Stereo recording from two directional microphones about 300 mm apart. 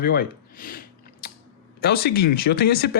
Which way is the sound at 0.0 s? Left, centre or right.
Left.